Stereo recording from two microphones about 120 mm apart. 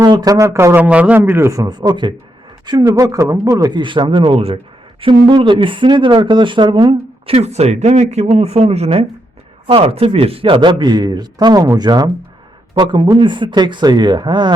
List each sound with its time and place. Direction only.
0.0 s a man's voice: 35° right (ahead or behind)
0.8 s a man's voice: 10° right (ahead or behind); by 2.1 s 40° right (ahead or behind)
2.8 s speech: 30° right (ahead or behind)
7.3 s speech: 65° right (ahead or behind); by 14.5 s 40° right (ahead or behind)